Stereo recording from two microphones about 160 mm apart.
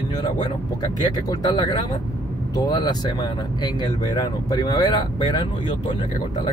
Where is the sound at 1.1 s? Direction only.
25° left (ahead or behind).